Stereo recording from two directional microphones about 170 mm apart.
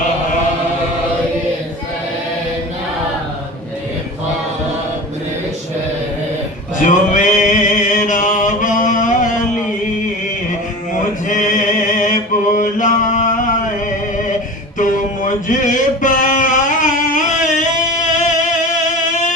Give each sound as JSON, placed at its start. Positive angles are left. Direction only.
{"t": 6.8, "sound": "music", "side_deg": 45}
{"t": 11.3, "sound": "mantra", "side_deg": 50}
{"t": 14.8, "sound": "a sound", "side_deg": 50}